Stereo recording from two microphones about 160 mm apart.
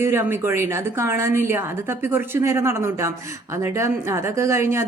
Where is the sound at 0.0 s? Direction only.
15° right (ahead or behind).